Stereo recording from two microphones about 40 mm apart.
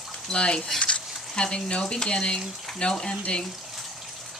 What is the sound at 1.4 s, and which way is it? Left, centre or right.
Speech, left.